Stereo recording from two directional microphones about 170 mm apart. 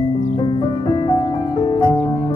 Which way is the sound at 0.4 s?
30° left (ahead or behind).